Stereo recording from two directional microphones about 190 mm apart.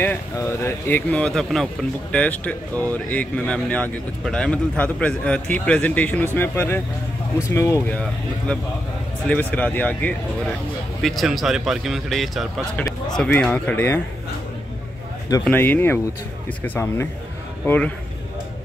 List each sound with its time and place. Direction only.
0.0 s speech: 10° left (ahead or behind)
8.5 s speech: 5° left (ahead or behind)
15.4 s speech: 10° left (ahead or behind)